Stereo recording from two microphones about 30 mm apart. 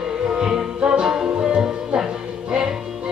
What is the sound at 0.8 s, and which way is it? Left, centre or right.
Music, right.